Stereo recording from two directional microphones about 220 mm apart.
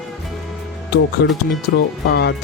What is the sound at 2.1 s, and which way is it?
Speech, 50° left (ahead or behind).